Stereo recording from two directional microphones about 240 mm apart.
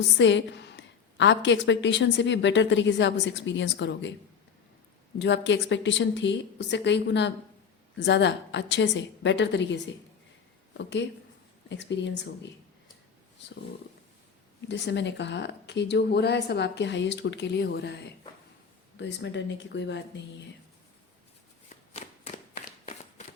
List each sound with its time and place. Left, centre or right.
0.2 s a woman's voice: left
5.2 s a woman's voice: left
14.7 s a woman's voice: left
21.7 s shuffling cards: left